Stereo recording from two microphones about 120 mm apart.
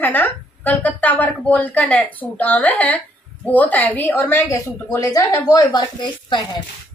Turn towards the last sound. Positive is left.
turn(degrees=35)  # may be behind; listen again after turning